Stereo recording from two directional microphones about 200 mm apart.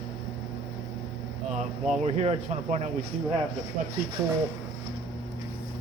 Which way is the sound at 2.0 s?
35° right (ahead or behind).